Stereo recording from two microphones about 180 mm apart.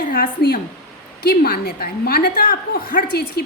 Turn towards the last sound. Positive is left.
turn(degrees=60)  # may be behind; listen again after turning